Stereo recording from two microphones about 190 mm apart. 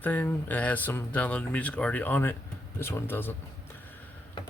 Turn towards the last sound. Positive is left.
turn(degrees=10)  # may be behind; listen again after turning